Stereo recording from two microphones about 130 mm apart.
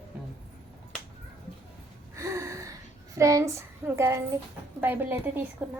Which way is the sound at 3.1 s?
25° right (ahead or behind).